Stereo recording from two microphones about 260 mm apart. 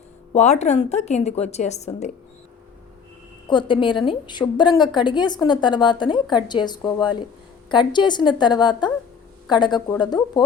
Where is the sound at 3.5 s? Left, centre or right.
Centre.